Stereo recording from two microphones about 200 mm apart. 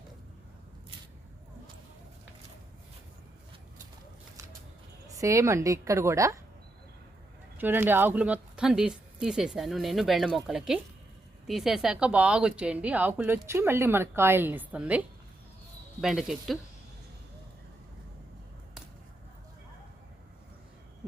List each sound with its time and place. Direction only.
5.0 s a woman's voice: 15° right (ahead or behind)
7.6 s a woman's voice: 10° right (ahead or behind)